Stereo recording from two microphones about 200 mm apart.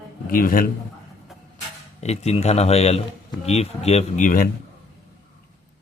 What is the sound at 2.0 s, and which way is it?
Speech, 35° left (ahead or behind).